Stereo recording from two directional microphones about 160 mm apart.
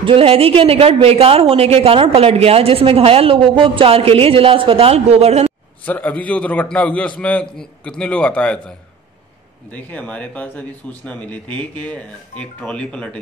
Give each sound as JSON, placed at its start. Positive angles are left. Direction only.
{"t": 0.0, "sound": "a woman's voice", "side_deg": -35}
{"t": 5.9, "sound": "speech", "side_deg": 10}